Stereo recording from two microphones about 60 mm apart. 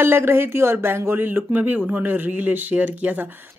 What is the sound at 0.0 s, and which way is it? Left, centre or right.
Speech, right.